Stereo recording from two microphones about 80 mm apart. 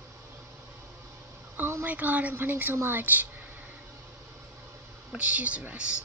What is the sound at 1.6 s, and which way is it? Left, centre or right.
Speech, right.